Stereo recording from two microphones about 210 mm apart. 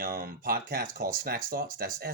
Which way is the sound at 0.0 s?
45° right (ahead or behind).